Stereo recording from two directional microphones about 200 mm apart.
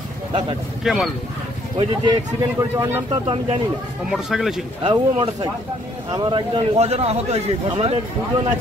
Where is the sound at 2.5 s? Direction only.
15° right (ahead or behind).